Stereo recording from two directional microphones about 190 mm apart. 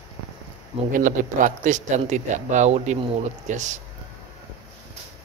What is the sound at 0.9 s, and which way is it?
Speech, 45° right (ahead or behind).